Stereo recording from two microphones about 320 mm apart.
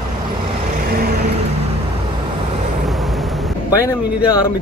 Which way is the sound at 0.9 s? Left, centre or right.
Right.